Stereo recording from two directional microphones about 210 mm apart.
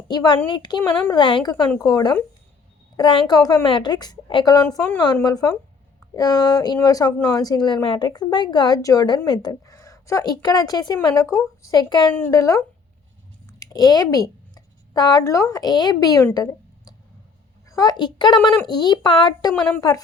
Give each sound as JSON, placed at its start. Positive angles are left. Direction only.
{"t": 0.1, "sound": "a woman's voice", "side_deg": 20}